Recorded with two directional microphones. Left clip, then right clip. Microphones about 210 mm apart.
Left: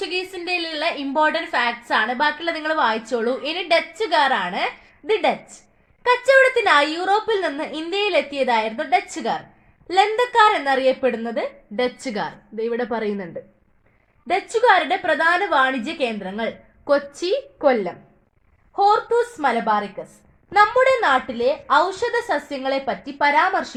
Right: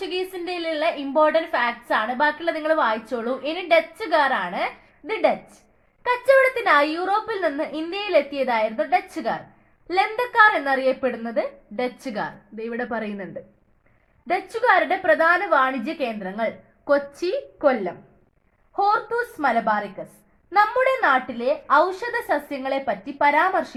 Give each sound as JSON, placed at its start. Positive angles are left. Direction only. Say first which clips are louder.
{"t": 0.0, "sound": "a woman's voice", "louder": "left 2 dB", "side_deg": 50}
{"t": 14.3, "sound": "a woman's voice", "louder": "left 3 dB", "side_deg": 45}